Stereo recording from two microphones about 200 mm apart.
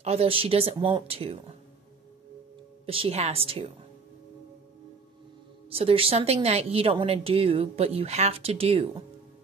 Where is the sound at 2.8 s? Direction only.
30° right (ahead or behind).